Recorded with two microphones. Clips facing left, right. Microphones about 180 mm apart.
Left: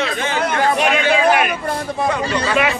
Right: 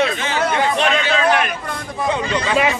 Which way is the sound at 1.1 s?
10° left (ahead or behind).